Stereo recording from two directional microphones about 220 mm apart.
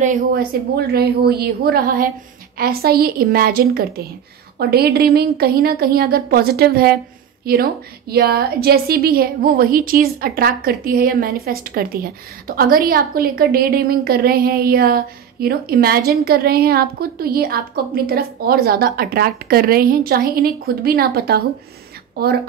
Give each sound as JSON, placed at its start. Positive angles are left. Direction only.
{"t": 0.0, "sound": "a woman's voice", "side_deg": -40}